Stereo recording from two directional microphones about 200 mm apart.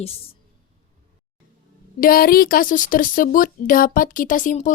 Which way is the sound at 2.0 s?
45° left (ahead or behind).